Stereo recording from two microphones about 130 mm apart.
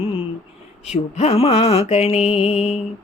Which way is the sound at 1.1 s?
55° left (ahead or behind).